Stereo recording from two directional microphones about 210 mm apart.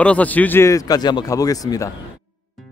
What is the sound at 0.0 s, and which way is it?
Speech, 5° left (ahead or behind).